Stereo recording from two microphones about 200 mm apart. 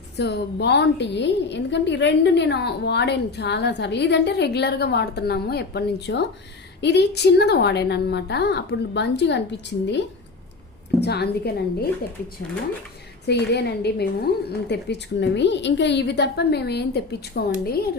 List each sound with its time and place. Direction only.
0.2 s a woman's voice: 60° left (ahead or behind)
11.0 s a woman's voice: 55° left (ahead or behind)
13.2 s a woman's voice: 55° left (ahead or behind)